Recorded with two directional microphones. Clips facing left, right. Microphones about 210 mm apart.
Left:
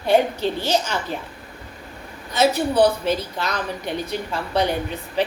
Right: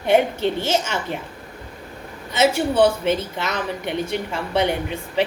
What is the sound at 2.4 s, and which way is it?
Speech, 25° right (ahead or behind).